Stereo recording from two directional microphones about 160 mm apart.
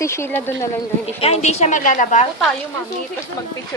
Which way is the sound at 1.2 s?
40° left (ahead or behind).